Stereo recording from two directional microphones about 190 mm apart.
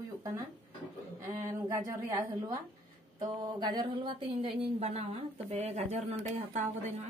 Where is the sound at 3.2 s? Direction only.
20° right (ahead or behind).